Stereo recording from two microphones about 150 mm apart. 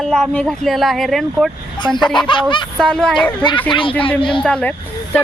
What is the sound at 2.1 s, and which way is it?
Speech, 30° left (ahead or behind).